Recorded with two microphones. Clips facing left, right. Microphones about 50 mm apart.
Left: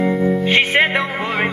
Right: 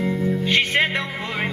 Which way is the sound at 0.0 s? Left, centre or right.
Left.